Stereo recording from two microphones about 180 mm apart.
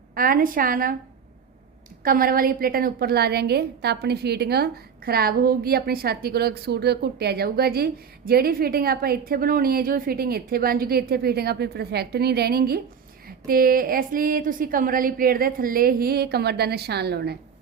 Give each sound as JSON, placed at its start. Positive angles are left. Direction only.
{"t": 0.1, "sound": "a woman's voice", "side_deg": -55}
{"t": 2.0, "sound": "a woman's voice", "side_deg": -55}